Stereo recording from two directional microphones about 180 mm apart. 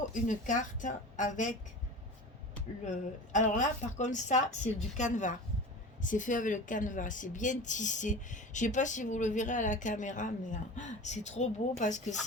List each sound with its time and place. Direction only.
0.1 s a woman's voice: 45° left (ahead or behind)
2.8 s a woman's voice: 40° left (ahead or behind)